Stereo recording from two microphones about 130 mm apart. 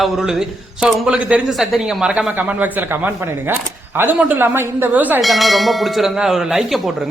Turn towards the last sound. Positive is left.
turn(degrees=0)  # may be behind; listen again after turning